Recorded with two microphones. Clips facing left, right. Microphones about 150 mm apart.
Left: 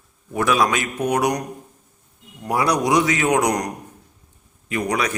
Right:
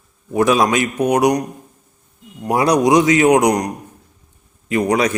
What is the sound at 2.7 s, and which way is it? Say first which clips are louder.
Speech: right 6 dB; 20° right (ahead or behind).